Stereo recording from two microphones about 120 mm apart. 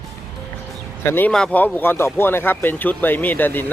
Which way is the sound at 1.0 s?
20° left (ahead or behind).